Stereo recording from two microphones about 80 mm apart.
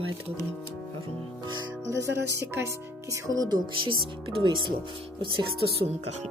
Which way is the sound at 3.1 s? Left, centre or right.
Right.